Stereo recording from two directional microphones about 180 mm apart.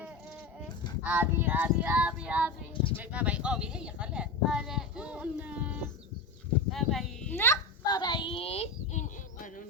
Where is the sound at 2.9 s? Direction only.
10° right (ahead or behind).